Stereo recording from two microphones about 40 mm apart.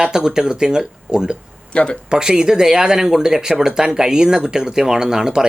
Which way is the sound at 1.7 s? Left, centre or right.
Left.